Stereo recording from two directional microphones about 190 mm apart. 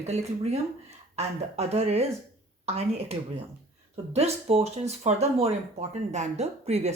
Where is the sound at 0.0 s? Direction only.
35° right (ahead or behind).